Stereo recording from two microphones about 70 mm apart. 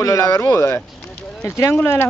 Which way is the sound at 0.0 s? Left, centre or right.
Left.